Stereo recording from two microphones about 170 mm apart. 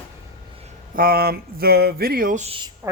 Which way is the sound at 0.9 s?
60° right (ahead or behind).